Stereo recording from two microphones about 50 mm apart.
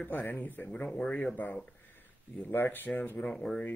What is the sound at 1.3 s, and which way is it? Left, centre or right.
Speech, left.